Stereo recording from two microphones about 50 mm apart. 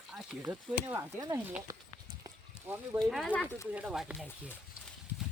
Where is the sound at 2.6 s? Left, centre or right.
Right.